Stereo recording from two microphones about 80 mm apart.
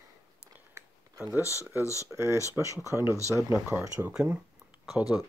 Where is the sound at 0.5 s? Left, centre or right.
Right.